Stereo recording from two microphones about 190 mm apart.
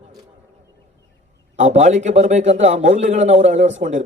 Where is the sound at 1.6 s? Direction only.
40° right (ahead or behind).